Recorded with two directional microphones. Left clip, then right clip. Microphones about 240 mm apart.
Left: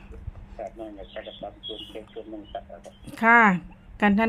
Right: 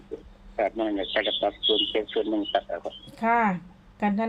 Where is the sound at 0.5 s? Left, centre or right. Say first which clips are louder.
Right 11 dB; right.